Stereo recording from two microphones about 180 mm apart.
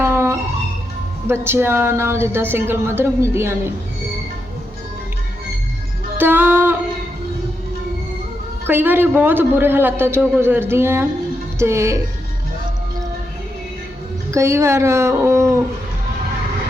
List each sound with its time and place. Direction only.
0.0 s music: 15° right (ahead or behind)
1.3 s a man's voice: 15° right (ahead or behind)
6.1 s music: 10° right (ahead or behind)
8.6 s a man's voice: 10° right (ahead or behind)
14.3 s speech: 15° right (ahead or behind)